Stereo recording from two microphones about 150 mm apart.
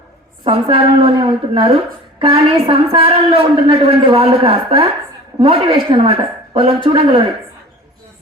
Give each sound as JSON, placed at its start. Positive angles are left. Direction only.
{"t": 0.4, "sound": "a woman's voice", "side_deg": -35}